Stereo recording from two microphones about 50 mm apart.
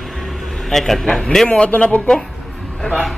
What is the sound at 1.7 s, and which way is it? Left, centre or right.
A man's voice, left.